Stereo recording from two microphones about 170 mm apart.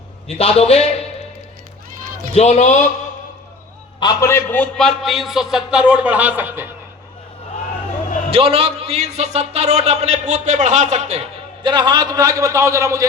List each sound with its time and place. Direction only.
0.3 s a man's voice: 35° left (ahead or behind)
2.3 s a man's voice: 40° left (ahead or behind)
4.0 s a man's voice: 15° left (ahead or behind); by 6.7 s 10° right (ahead or behind)
8.3 s a man's voice: 35° right (ahead or behind)
11.6 s a man's voice: 25° right (ahead or behind)